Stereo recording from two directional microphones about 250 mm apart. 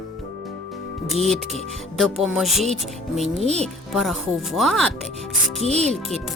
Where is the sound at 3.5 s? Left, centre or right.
Right.